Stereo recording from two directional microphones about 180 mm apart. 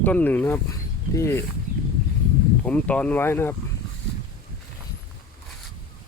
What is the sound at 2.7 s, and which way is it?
Speech, 5° left (ahead or behind).